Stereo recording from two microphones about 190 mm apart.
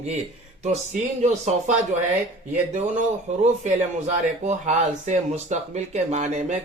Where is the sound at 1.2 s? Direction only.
35° right (ahead or behind).